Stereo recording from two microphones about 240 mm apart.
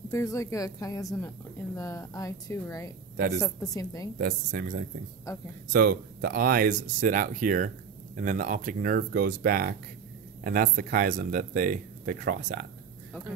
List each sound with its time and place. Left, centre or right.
0.1 s a woman's voice: centre
4.2 s speech: right
5.3 s a woman's voice: centre
5.7 s speech: right